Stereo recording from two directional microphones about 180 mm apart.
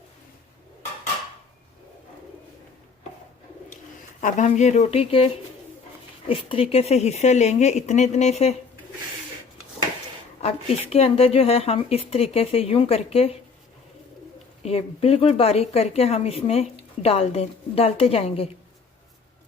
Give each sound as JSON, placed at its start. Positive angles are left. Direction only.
{"t": 4.2, "sound": "a woman's voice", "side_deg": 45}
{"t": 10.4, "sound": "a woman's voice", "side_deg": 35}
{"t": 14.6, "sound": "a woman's voice", "side_deg": 35}